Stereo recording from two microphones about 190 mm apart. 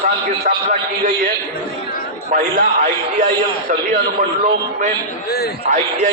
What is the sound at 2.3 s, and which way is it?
Speech, 45° right (ahead or behind).